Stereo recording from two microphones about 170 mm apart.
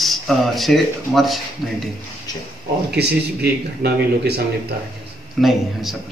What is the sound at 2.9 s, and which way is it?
Speech, 75° right (ahead or behind).